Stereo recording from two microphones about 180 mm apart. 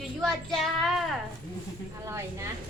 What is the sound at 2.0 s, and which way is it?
Speech, 15° right (ahead or behind).